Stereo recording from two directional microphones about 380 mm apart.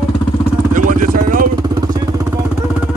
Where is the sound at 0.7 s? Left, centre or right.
Right.